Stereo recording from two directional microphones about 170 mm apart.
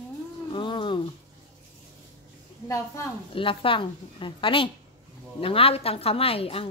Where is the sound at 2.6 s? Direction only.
15° left (ahead or behind).